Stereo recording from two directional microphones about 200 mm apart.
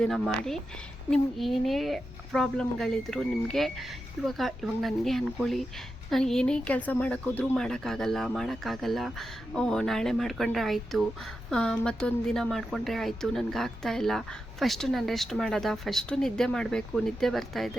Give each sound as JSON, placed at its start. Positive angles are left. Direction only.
{"t": 0.0, "sound": "a woman's voice", "side_deg": 0}